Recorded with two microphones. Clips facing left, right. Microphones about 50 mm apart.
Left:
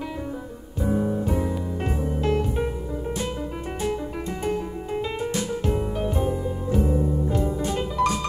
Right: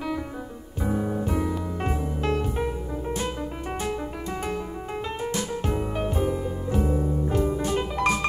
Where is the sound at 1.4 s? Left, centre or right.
Right.